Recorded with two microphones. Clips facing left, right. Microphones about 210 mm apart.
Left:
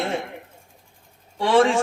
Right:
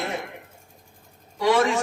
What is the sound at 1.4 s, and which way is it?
Speech, 30° left (ahead or behind).